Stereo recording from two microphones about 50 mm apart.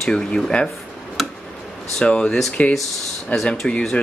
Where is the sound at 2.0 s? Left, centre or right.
Centre.